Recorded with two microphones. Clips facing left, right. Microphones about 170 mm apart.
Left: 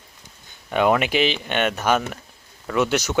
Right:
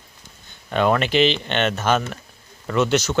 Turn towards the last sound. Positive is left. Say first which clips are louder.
# right 2 dB
turn(degrees=10)  # may be behind; listen again after turning